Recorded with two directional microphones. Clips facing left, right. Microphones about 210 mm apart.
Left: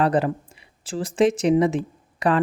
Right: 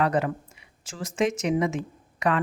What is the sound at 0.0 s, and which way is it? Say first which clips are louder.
A woman's voice: left 4 dB; 35° left (ahead or behind).